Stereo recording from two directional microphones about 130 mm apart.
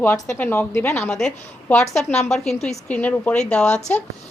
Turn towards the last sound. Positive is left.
turn(degrees=5)  # may be behind; listen again after turning